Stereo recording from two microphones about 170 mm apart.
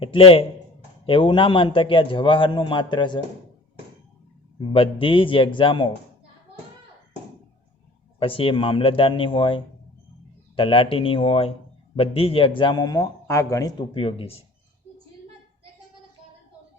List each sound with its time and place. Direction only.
0.0 s speech: 30° left (ahead or behind)
4.7 s speech: 30° left (ahead or behind)
8.2 s speech: 30° left (ahead or behind)